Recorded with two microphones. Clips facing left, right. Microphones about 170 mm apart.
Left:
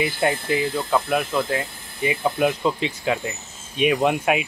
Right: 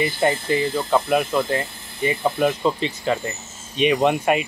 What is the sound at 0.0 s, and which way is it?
Speech, centre (ahead or behind).